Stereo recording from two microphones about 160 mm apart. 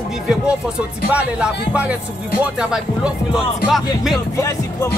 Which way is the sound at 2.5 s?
5° right (ahead or behind).